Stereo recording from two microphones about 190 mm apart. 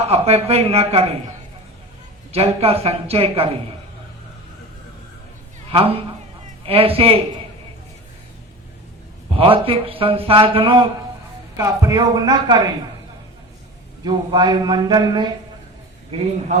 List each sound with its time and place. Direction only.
0.1 s a man's voice: 30° right (ahead or behind)
2.3 s a man's voice: 30° right (ahead or behind)
5.7 s speech: 30° right (ahead or behind)
9.3 s speech: 30° right (ahead or behind)
11.5 s speech: 15° right (ahead or behind)
14.0 s speech: 20° right (ahead or behind)